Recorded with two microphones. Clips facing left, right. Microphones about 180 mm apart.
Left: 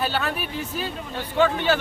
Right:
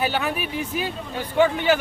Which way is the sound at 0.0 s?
15° right (ahead or behind).